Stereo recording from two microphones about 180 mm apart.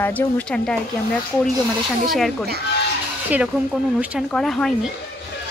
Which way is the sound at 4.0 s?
5° right (ahead or behind).